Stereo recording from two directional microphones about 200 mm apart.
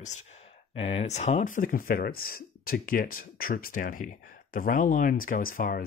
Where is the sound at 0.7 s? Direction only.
30° left (ahead or behind).